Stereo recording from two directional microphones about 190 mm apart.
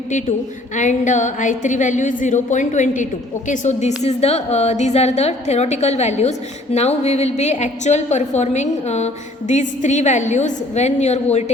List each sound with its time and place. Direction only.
0.8 s a woman's voice: 40° left (ahead or behind)